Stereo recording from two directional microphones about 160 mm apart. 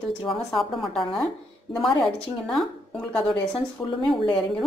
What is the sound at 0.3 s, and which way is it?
Speech, centre (ahead or behind).